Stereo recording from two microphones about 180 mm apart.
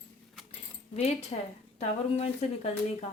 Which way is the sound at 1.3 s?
35° left (ahead or behind).